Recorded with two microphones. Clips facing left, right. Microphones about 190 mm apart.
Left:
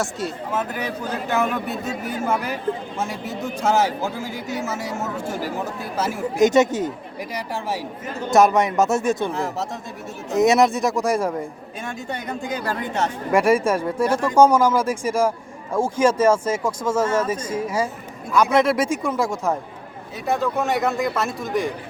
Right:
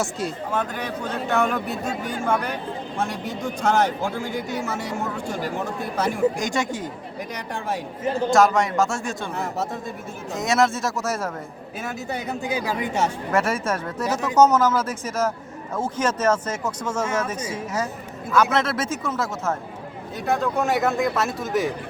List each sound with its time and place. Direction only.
0.0 s a man's voice: centre (ahead or behind)
6.4 s speech: 20° left (ahead or behind)
7.3 s a man's voice: 5° left (ahead or behind)
8.3 s speech: 20° left (ahead or behind)
9.3 s a man's voice: centre (ahead or behind)
10.3 s speech: 20° left (ahead or behind)
11.8 s speech: 5° right (ahead or behind)
13.3 s speech: 10° left (ahead or behind)
18.5 s speech: 15° left (ahead or behind)
20.2 s a man's voice: centre (ahead or behind)